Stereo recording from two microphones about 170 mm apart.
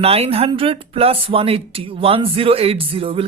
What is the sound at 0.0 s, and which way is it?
Speech, 35° right (ahead or behind).